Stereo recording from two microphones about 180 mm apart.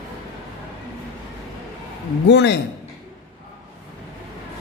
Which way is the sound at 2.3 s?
70° left (ahead or behind).